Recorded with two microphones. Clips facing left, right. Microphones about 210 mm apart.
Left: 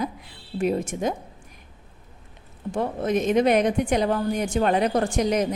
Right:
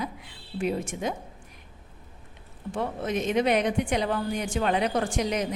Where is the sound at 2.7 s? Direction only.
45° left (ahead or behind).